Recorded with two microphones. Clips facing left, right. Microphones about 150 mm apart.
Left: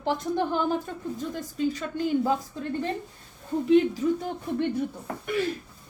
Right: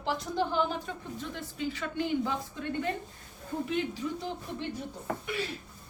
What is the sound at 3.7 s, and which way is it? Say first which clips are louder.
A woman's voice: left 14 dB; 45° left (ahead or behind).